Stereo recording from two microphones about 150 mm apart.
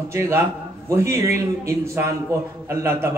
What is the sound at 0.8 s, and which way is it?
A man's voice, 20° right (ahead or behind).